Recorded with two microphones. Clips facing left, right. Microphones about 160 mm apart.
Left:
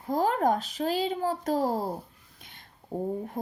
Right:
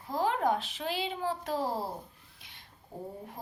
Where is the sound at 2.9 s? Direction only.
50° left (ahead or behind).